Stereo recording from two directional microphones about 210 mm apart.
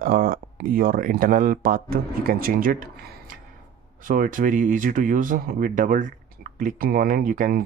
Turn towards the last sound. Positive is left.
turn(degrees=-40)  # may be behind; listen again after turning